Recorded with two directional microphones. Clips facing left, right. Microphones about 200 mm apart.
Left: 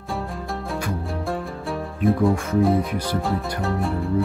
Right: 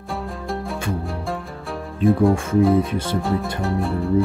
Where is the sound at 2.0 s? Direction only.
25° right (ahead or behind).